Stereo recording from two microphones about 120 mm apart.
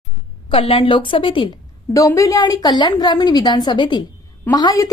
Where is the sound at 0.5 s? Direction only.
55° left (ahead or behind).